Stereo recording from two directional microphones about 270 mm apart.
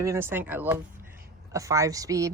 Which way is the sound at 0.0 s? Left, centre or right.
Centre.